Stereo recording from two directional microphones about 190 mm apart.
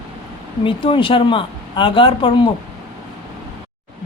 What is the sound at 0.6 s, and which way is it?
Speech, 25° left (ahead or behind).